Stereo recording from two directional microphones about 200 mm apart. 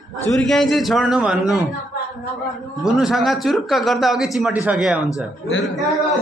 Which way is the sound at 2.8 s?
5° right (ahead or behind).